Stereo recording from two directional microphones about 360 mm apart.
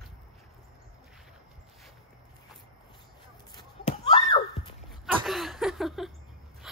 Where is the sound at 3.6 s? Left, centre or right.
Centre.